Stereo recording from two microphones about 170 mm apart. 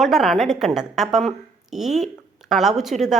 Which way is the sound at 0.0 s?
Centre (ahead or behind).